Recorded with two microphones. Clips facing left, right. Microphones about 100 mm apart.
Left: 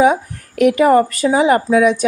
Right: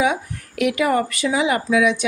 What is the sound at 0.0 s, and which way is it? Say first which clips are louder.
Speech: left 7 dB; 40° left (ahead or behind).